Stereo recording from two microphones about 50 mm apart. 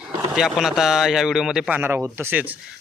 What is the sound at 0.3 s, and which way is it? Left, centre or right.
Speech, centre.